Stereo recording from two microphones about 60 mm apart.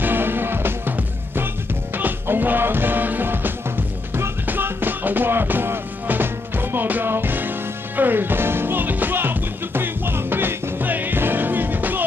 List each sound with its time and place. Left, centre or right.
0.0 s music: right